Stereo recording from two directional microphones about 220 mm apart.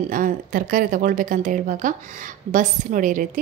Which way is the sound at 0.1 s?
40° right (ahead or behind).